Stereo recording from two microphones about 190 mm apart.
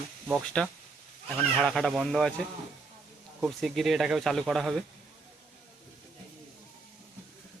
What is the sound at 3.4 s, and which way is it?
Speech, centre (ahead or behind).